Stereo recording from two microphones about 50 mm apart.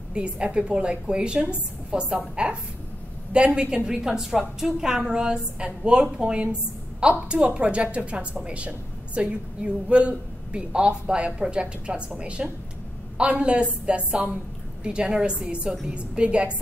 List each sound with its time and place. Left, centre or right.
0.1 s a woman's voice: centre